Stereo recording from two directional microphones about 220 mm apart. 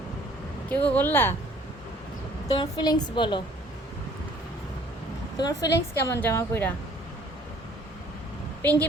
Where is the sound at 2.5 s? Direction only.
20° left (ahead or behind).